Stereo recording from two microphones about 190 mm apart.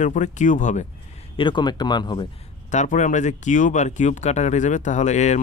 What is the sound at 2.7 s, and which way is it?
Speech, 40° left (ahead or behind).